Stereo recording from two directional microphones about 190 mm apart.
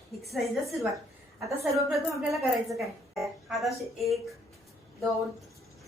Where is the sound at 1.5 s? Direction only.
15° right (ahead or behind).